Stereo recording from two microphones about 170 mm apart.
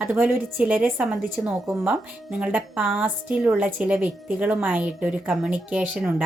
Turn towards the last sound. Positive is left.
turn(degrees=-10)  # may be behind; listen again after turning